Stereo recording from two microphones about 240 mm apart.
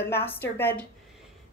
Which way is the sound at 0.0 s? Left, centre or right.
Centre.